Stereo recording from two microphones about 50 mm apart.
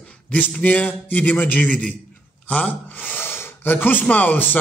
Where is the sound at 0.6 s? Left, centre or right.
Left.